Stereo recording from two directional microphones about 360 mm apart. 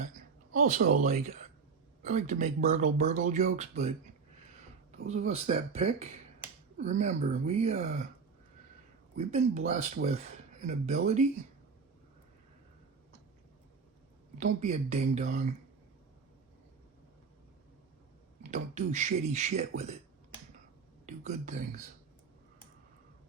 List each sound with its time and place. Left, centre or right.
0.5 s speech: right
9.1 s speech: centre
14.6 s speech: centre
18.5 s speech: centre
21.1 s speech: centre